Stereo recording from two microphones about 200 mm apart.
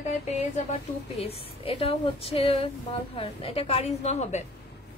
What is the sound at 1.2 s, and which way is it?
A woman's voice, 30° left (ahead or behind).